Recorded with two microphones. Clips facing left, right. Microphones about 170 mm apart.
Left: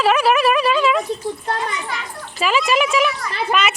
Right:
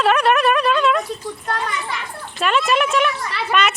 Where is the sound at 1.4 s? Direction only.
20° left (ahead or behind).